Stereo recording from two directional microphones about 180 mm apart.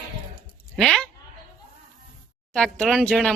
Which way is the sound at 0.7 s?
Centre (ahead or behind).